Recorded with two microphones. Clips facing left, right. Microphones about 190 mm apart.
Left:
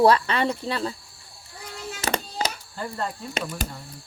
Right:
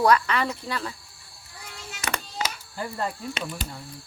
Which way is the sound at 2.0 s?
30° left (ahead or behind).